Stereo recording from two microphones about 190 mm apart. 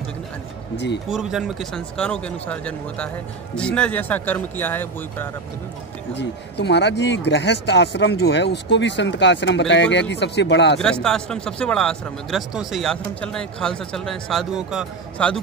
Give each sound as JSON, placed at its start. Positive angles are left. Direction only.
{"t": 1.1, "sound": "speech", "side_deg": 0}
{"t": 6.1, "sound": "speech", "side_deg": 65}
{"t": 10.8, "sound": "speech", "side_deg": 5}